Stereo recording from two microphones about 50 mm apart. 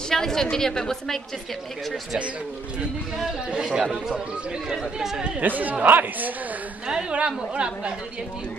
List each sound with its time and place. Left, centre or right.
0.1 s a woman's voice: centre
3.4 s speech: centre
5.4 s speech: right
6.9 s a woman's voice: right